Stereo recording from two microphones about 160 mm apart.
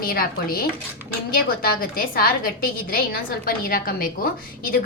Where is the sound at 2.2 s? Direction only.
65° left (ahead or behind).